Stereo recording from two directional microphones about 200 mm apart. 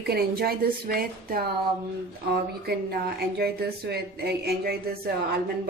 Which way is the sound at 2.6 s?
50° right (ahead or behind).